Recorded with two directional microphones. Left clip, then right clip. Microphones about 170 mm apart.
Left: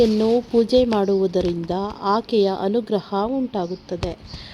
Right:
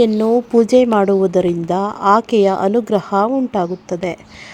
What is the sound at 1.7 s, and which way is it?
A woman's voice, 25° right (ahead or behind).